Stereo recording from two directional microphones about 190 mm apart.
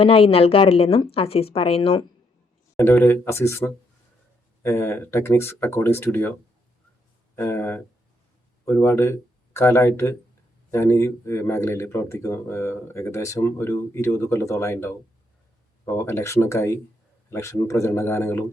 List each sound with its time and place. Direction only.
0.0 s speech: 30° left (ahead or behind)
2.7 s speech: 10° left (ahead or behind)
7.3 s speech: 10° left (ahead or behind)
16.0 s speech: 15° left (ahead or behind)